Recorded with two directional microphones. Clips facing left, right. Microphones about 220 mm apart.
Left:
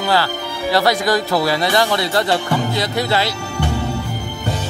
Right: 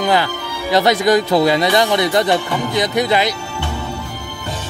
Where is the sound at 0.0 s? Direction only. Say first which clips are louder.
Right 2 dB; 20° right (ahead or behind).